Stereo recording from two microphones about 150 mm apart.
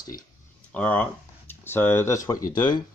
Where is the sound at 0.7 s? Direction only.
10° left (ahead or behind); by 2.8 s 25° left (ahead or behind).